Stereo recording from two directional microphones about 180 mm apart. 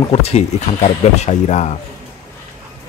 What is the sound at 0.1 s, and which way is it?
Speech, 35° left (ahead or behind).